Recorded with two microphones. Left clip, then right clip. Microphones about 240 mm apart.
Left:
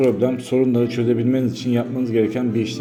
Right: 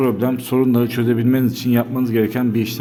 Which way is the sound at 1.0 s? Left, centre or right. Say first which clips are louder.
Right 1 dB; right.